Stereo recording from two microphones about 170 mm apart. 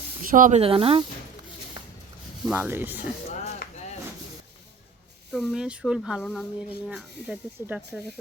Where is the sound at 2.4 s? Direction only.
5° right (ahead or behind).